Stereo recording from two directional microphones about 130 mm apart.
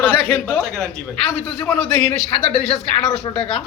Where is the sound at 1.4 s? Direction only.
15° left (ahead or behind).